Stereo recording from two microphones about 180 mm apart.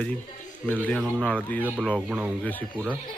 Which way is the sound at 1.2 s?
10° left (ahead or behind).